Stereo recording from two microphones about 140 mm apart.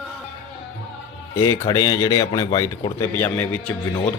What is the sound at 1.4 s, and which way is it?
Speech, 25° left (ahead or behind).